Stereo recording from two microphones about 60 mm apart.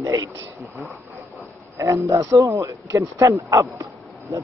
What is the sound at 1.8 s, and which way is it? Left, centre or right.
A man's voice, right.